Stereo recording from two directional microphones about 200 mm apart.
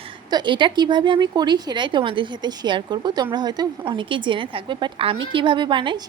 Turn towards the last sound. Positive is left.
turn(degrees=-25)  # may be behind; listen again after turning